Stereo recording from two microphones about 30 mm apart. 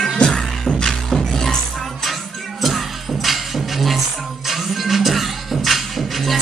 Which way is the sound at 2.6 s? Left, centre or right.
Centre.